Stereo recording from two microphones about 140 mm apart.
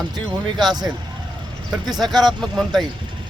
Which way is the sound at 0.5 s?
30° right (ahead or behind).